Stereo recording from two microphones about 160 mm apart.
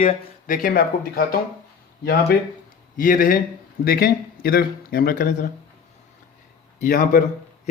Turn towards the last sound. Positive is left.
turn(degrees=60)  # may be behind; listen again after turning